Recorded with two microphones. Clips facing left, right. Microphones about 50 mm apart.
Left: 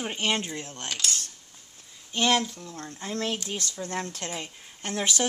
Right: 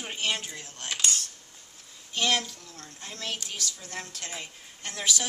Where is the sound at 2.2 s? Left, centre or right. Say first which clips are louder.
Left 3 dB; left.